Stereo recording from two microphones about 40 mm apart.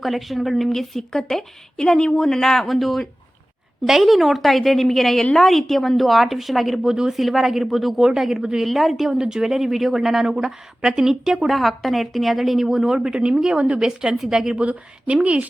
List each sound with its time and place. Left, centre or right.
0.0 s a woman's voice: centre
8.6 s a woman's voice: centre
9.1 s speech: centre
11.4 s a woman's voice: centre
14.5 s speech: right